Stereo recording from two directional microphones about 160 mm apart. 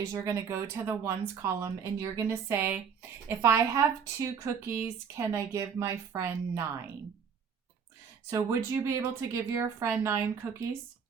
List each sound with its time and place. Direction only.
0.0 s speech: 20° right (ahead or behind)
8.3 s speech: 20° right (ahead or behind)